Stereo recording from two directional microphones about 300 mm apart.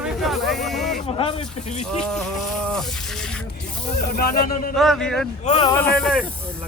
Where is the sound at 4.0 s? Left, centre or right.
Left.